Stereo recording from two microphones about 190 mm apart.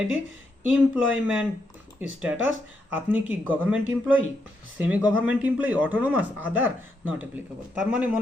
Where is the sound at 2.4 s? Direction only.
10° right (ahead or behind).